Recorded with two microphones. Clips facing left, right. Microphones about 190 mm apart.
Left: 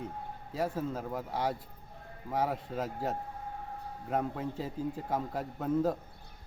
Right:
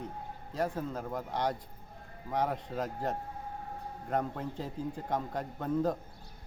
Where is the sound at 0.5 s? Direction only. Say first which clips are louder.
Even; 5° left (ahead or behind).